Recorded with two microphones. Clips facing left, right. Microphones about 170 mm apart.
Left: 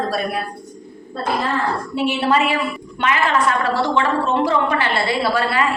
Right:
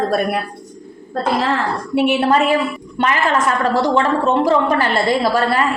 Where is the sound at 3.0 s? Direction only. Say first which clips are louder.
Right 1 dB; 40° right (ahead or behind).